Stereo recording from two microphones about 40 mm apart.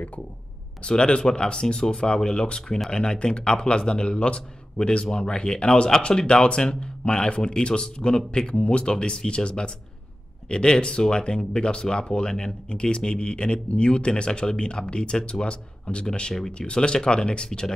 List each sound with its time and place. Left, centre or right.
0.8 s speech: left